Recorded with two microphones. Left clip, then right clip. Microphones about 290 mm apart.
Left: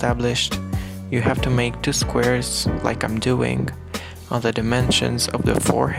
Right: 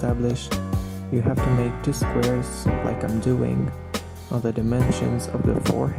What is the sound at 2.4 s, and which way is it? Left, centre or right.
Speech, left.